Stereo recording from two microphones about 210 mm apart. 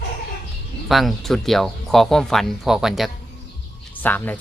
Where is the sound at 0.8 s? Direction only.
Centre (ahead or behind).